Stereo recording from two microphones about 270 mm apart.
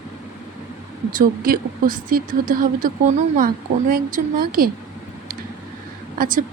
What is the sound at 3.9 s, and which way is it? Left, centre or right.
Speech, right.